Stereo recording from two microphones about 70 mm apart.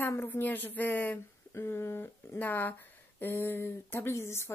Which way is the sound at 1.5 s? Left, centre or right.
Left.